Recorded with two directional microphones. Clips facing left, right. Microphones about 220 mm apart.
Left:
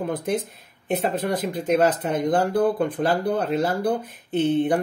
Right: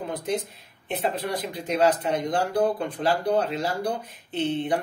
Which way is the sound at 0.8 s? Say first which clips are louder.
Left 4 dB; 45° left (ahead or behind).